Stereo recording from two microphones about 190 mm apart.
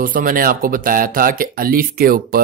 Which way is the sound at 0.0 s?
45° right (ahead or behind).